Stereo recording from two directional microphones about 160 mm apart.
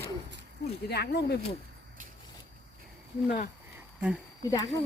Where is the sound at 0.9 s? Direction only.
90° left.